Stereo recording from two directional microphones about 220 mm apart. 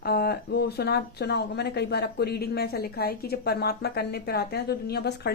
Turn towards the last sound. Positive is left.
turn(degrees=45)  # may be behind; listen again after turning